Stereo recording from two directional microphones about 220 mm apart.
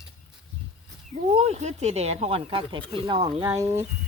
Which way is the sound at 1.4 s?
30° right (ahead or behind).